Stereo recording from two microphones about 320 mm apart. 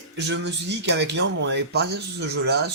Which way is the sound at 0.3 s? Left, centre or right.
Right.